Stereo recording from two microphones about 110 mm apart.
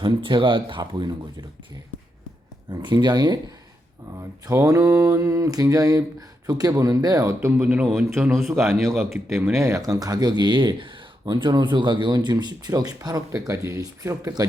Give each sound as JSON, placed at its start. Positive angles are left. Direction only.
{"t": 0.0, "sound": "speech", "side_deg": -50}
{"t": 2.8, "sound": "speech", "side_deg": -40}
{"t": 4.2, "sound": "a sound", "side_deg": -30}
{"t": 5.6, "sound": "speech", "side_deg": -35}
{"t": 7.3, "sound": "a sound", "side_deg": -25}
{"t": 8.3, "sound": "a man's voice", "side_deg": 0}
{"t": 9.6, "sound": "speech", "side_deg": -25}